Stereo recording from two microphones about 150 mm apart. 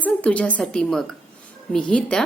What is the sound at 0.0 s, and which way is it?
A woman's voice, 10° left (ahead or behind).